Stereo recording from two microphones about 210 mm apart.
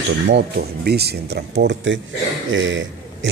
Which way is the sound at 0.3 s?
50° right (ahead or behind).